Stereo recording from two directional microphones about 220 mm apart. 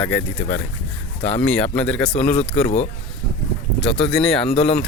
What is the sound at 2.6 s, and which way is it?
Speech, 30° left (ahead or behind).